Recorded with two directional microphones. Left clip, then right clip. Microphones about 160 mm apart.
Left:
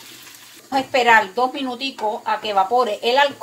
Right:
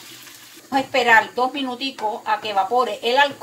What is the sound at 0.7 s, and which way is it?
Speech, 45° left (ahead or behind).